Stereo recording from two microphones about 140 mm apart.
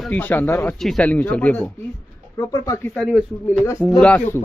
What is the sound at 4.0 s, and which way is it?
Speech, 10° left (ahead or behind).